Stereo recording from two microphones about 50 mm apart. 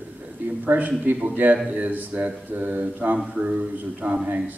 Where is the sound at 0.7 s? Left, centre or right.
Right.